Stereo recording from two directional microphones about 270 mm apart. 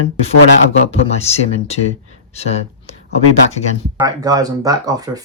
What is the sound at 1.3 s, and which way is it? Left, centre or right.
Speech, left.